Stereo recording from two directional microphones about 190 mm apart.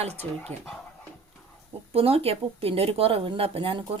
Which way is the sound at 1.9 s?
30° right (ahead or behind).